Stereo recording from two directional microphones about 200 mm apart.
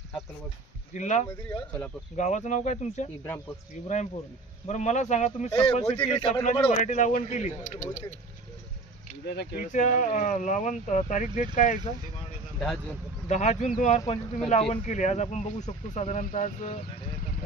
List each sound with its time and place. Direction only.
0.9 s speech: 35° left (ahead or behind)
1.5 s speech: 15° left (ahead or behind)
2.1 s a man's voice: 35° left (ahead or behind)
6.4 s speech: 35° left (ahead or behind)
9.2 s speech: 55° left (ahead or behind)
9.7 s speech: 40° left (ahead or behind)
13.3 s speech: 35° left (ahead or behind)